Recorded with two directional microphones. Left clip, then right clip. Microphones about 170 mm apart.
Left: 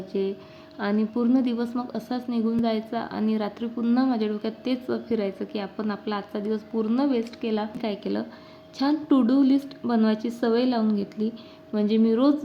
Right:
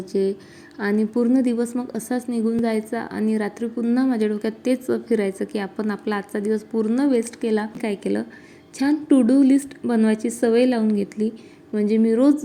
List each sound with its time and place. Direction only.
0.1 s a woman's voice: 30° right (ahead or behind)